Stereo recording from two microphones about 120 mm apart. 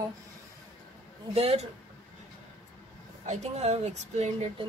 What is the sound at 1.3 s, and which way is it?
Speech, 60° right (ahead or behind).